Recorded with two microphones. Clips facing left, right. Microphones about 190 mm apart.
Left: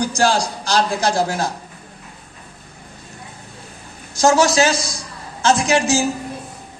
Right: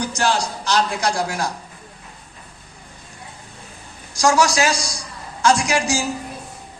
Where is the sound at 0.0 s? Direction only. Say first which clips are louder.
Left 3 dB; 35° left (ahead or behind).